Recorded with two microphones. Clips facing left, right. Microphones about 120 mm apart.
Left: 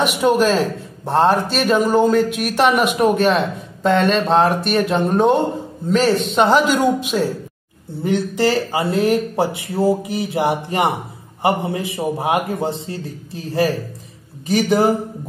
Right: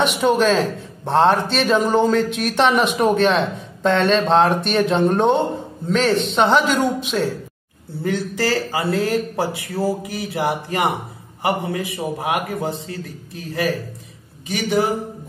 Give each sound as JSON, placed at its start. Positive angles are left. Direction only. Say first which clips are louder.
{"t": 0.2, "sound": "a man's voice", "louder": "left 2 dB", "side_deg": 5}
{"t": 8.0, "sound": "speech", "louder": "left 4 dB", "side_deg": 20}